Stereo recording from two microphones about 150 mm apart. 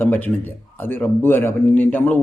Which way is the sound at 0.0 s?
10° left (ahead or behind).